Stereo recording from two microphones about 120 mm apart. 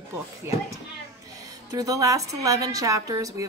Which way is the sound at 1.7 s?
30° right (ahead or behind).